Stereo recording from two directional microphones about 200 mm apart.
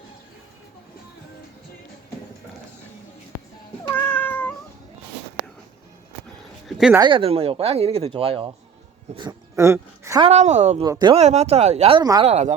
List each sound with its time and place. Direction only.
3.8 s cat: 10° left (ahead or behind)
6.7 s a sound: 5° right (ahead or behind)
7.0 s speech: 25° right (ahead or behind)
10.2 s speech: 35° right (ahead or behind)
10.8 s speech: 20° right (ahead or behind)
11.2 s speech: 30° right (ahead or behind)
12.2 s speech: 35° right (ahead or behind)